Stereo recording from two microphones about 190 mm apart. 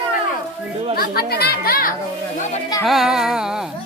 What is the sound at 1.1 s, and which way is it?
Speech, 55° left (ahead or behind).